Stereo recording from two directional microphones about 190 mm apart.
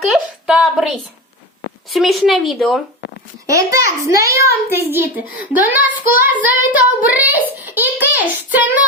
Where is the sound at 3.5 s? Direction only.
15° right (ahead or behind).